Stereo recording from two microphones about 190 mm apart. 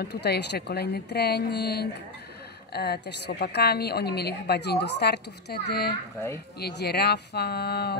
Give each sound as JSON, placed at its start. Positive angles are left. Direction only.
{"t": 0.0, "sound": "a woman's voice", "side_deg": 60}